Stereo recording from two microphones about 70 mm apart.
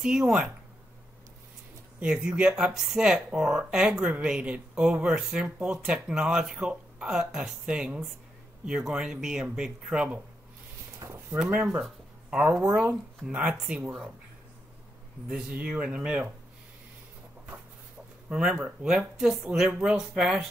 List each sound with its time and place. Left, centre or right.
0.0 s speech: centre
2.0 s speech: centre
11.2 s speech: centre
11.5 s speech: right
11.8 s speech: centre
15.2 s speech: centre
18.3 s speech: centre
19.1 s speech: centre